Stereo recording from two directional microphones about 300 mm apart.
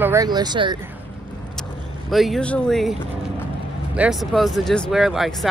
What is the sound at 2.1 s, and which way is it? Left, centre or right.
Speech, centre.